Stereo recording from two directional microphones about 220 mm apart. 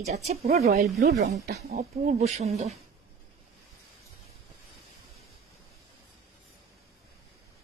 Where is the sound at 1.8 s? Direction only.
30° right (ahead or behind).